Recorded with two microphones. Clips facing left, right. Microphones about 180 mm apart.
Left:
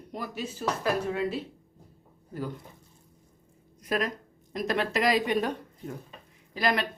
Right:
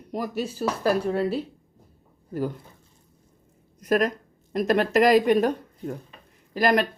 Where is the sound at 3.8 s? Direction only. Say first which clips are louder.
Right 7 dB; 45° right (ahead or behind).